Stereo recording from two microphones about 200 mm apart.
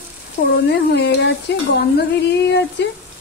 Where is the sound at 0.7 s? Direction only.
60° left (ahead or behind).